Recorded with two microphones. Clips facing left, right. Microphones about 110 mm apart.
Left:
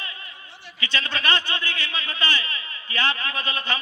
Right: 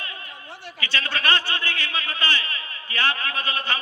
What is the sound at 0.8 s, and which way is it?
A man's voice, 20° left (ahead or behind).